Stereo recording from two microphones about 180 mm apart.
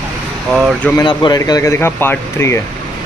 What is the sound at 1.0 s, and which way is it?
Speech, 25° left (ahead or behind).